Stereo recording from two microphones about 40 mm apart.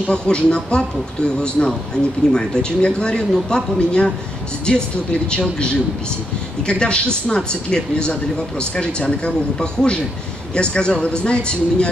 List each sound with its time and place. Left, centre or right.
0.1 s speech: left